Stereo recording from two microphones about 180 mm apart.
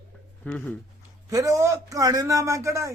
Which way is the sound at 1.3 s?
20° right (ahead or behind).